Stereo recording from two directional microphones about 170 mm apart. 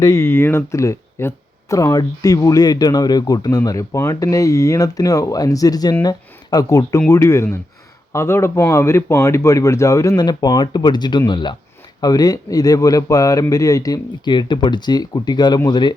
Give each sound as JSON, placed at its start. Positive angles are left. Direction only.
{"t": 0.0, "sound": "speech", "side_deg": 15}